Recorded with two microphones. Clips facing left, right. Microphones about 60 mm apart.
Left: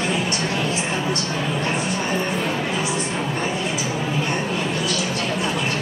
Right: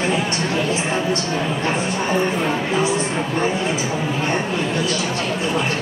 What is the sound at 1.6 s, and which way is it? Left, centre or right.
Speech, right.